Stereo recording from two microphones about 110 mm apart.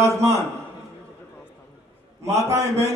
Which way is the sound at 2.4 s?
30° right (ahead or behind).